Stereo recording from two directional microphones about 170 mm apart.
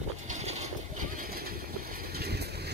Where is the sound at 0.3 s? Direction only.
40° right (ahead or behind).